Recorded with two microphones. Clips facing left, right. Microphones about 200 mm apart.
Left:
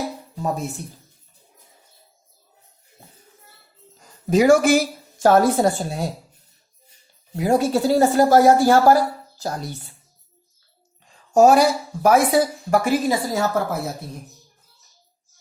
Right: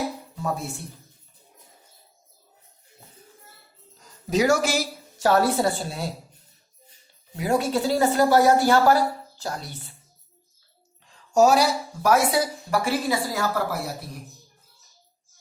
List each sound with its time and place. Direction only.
4.3 s speech: 55° left (ahead or behind)
7.3 s speech: 40° left (ahead or behind)
11.3 s speech: 50° left (ahead or behind)
13.3 s speech: 20° left (ahead or behind)